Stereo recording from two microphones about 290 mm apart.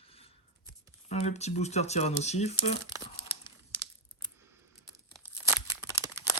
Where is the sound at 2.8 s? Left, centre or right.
Centre.